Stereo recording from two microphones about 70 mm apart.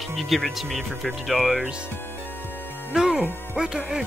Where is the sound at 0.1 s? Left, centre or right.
Centre.